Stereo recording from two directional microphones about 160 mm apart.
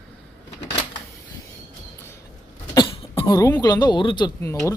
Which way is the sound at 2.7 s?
30° left (ahead or behind).